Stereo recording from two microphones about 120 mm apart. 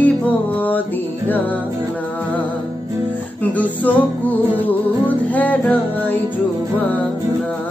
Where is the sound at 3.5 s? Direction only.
10° left (ahead or behind).